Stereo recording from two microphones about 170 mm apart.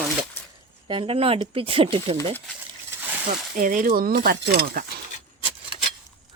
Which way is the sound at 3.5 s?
50° right (ahead or behind).